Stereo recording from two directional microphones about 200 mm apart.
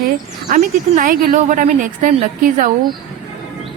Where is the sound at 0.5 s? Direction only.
40° right (ahead or behind).